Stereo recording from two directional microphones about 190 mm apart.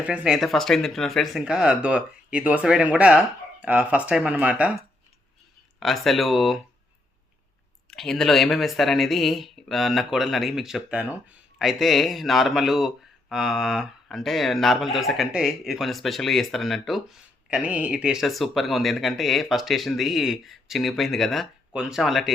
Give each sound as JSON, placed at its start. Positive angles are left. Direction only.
{"t": 0.0, "sound": "speech", "side_deg": -5}
{"t": 5.8, "sound": "speech", "side_deg": 0}
{"t": 7.9, "sound": "speech", "side_deg": 5}